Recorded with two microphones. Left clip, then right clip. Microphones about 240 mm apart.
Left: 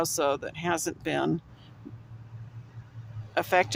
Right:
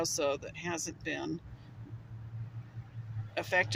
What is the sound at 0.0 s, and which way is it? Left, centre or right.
A woman's voice, left.